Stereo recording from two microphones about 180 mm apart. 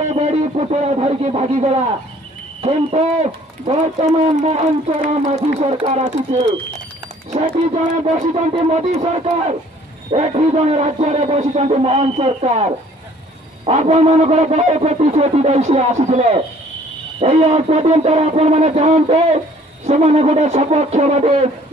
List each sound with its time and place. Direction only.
0.1 s a man's voice: 40° right (ahead or behind)
7.6 s a man's voice: 40° right (ahead or behind)